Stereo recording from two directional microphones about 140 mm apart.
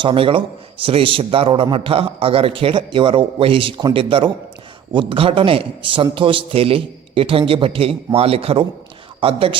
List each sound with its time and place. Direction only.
0.0 s a man's voice: 40° right (ahead or behind)